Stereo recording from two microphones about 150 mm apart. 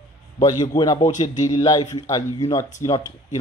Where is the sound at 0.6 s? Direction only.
25° left (ahead or behind).